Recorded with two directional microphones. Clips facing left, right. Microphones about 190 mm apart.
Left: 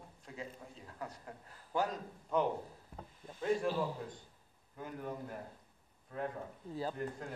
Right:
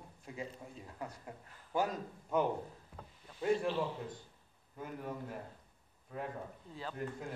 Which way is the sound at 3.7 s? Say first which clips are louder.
Even; 40° left (ahead or behind).